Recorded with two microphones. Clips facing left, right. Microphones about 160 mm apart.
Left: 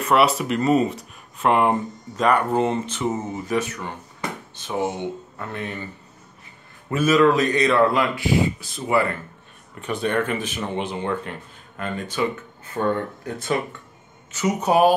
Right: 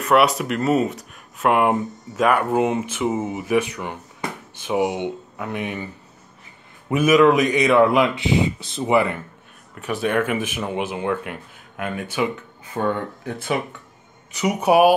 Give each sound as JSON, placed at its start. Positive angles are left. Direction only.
{"t": 0.0, "sound": "speech", "side_deg": 0}
{"t": 6.9, "sound": "speech", "side_deg": -15}
{"t": 9.8, "sound": "speech", "side_deg": -5}